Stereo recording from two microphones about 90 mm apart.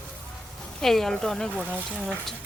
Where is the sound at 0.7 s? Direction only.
5° left (ahead or behind).